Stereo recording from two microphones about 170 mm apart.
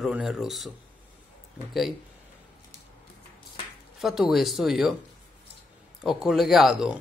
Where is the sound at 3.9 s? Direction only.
Centre (ahead or behind).